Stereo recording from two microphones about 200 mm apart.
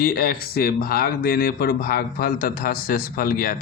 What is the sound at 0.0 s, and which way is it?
Speech, 50° left (ahead or behind).